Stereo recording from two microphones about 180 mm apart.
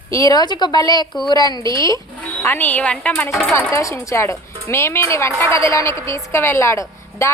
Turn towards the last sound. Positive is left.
turn(degrees=15)  # may be behind; listen again after turning